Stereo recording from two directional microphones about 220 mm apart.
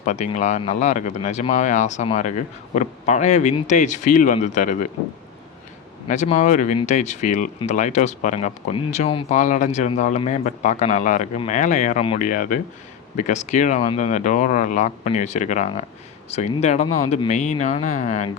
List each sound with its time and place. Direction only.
0.0 s speech: 35° left (ahead or behind)
6.1 s speech: 35° left (ahead or behind)